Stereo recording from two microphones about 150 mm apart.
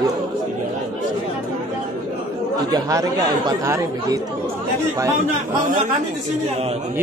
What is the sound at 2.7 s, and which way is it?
Speech, 25° right (ahead or behind).